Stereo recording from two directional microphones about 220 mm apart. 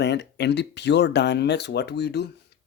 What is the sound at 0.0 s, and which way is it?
Speech, 50° left (ahead or behind).